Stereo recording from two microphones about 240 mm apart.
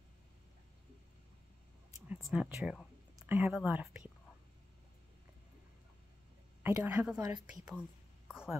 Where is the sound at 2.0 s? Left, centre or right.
Centre.